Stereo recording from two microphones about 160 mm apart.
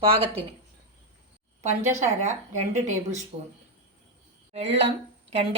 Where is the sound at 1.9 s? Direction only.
45° right (ahead or behind).